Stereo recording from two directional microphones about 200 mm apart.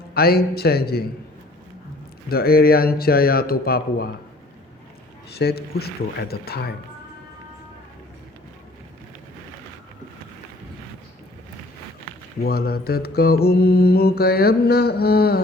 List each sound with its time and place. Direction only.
0.1 s mantra: 50° left (ahead or behind)
2.3 s mantra: 50° left (ahead or behind)
5.3 s mantra: 55° left (ahead or behind)
12.4 s mantra: 50° left (ahead or behind)